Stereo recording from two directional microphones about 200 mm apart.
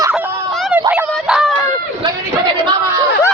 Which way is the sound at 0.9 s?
5° right (ahead or behind).